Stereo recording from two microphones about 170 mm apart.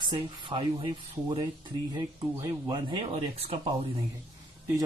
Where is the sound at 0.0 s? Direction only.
30° right (ahead or behind).